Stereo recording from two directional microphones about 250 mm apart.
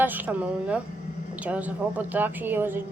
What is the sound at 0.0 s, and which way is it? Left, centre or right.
A woman's voice, centre.